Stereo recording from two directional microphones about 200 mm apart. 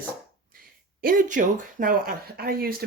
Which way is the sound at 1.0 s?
45° right (ahead or behind).